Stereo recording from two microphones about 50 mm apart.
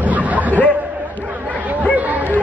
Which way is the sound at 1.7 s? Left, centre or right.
Right.